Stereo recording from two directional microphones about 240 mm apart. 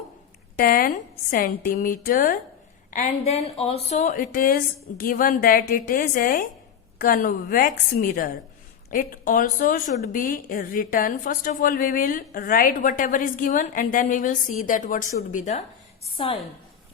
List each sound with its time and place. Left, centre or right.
0.5 s a woman's voice: left